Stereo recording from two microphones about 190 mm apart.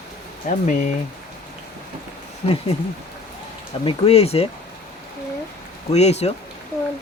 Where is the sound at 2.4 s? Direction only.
30° left (ahead or behind).